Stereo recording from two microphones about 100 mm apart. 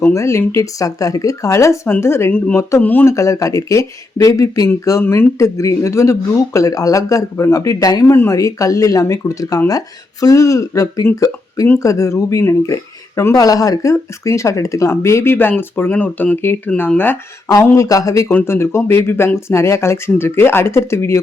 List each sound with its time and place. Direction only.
0.1 s speech: 30° left (ahead or behind)
2.8 s speech: 20° left (ahead or behind)
3.2 s speech: 35° left (ahead or behind)
17.5 s speech: 30° left (ahead or behind)
18.3 s speech: 20° left (ahead or behind)